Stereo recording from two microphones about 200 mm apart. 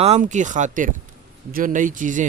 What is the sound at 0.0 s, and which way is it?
A man's voice, 35° right (ahead or behind).